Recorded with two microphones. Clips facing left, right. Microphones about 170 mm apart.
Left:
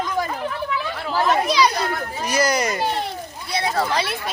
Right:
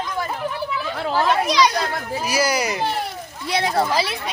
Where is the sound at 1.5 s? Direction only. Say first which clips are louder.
Even; centre (ahead or behind).